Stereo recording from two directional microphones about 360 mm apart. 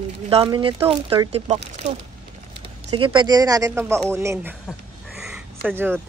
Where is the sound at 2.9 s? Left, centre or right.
Centre.